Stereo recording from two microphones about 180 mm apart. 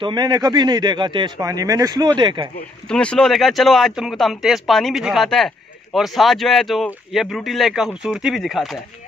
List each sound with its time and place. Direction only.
0.0 s speech: 25° right (ahead or behind)
2.9 s speech: 5° left (ahead or behind)